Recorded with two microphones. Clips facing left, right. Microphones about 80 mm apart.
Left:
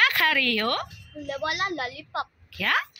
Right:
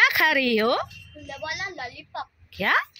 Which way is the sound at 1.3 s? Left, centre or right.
Left.